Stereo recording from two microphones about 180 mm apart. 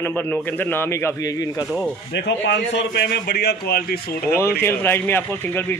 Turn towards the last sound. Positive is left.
turn(degrees=10)  # may be behind; listen again after turning